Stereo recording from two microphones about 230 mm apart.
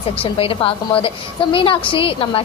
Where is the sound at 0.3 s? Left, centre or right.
Left.